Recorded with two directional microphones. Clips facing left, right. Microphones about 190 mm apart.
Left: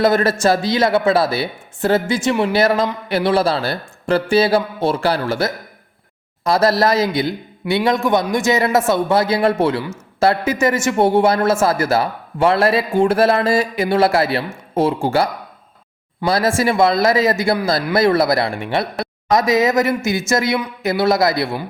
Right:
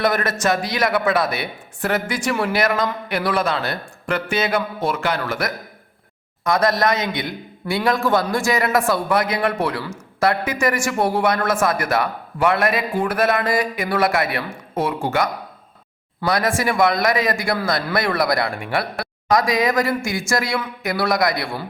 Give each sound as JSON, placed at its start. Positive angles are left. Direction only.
{"t": 0.0, "sound": "a man's voice", "side_deg": 30}